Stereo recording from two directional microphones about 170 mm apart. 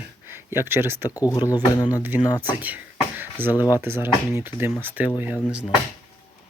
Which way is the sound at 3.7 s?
15° right (ahead or behind).